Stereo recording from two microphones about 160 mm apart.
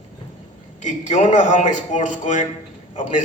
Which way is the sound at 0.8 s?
50° left (ahead or behind).